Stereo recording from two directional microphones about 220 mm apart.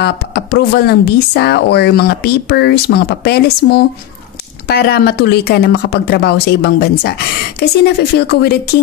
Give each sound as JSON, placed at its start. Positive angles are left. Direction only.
{"t": 0.0, "sound": "speech", "side_deg": 45}